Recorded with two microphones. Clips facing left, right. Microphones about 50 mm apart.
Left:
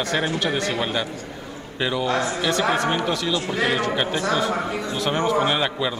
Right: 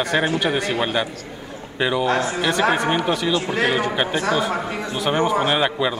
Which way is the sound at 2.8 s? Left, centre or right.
Centre.